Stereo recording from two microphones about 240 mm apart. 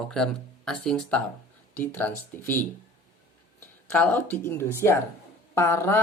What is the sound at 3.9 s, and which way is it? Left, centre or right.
Speech, centre.